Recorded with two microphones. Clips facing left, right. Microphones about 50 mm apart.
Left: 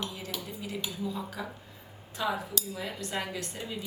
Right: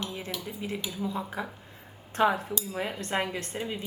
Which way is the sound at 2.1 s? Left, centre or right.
Right.